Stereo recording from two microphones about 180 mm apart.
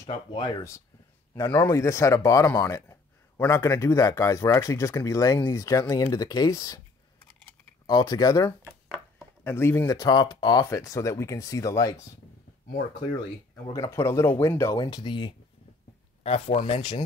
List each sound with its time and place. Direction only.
0.0 s speech: 25° left (ahead or behind)
1.3 s speech: 15° left (ahead or behind)
7.8 s speech: 25° left (ahead or behind)
13.7 s speech: 15° left (ahead or behind); by 17.0 s 35° left (ahead or behind)